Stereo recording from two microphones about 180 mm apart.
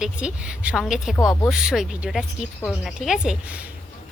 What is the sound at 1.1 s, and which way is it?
Speech, 15° left (ahead or behind).